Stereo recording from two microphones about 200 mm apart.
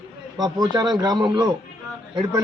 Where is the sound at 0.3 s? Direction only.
20° right (ahead or behind).